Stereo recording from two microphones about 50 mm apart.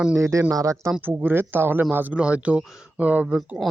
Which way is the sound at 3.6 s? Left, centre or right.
Centre.